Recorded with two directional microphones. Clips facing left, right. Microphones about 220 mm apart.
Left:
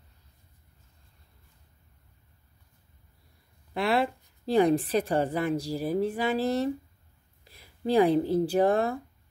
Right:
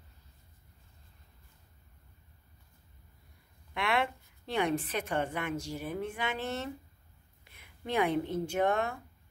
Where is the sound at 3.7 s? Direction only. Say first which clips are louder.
Left 5 dB; 35° left (ahead or behind).